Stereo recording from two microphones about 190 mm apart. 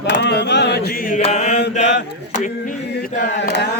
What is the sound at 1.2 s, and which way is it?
Mantra, 35° left (ahead or behind).